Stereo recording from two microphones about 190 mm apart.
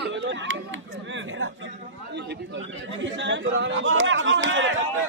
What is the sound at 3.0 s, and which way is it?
Chatter, 75° right (ahead or behind).